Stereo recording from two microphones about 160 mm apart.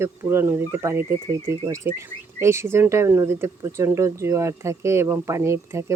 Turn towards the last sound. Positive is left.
turn(degrees=-15)  # may be behind; listen again after turning